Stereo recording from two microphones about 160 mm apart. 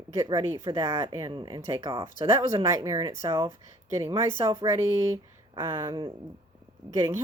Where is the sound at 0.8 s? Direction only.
20° right (ahead or behind).